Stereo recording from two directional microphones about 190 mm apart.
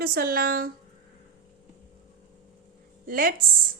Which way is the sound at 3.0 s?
50° right (ahead or behind).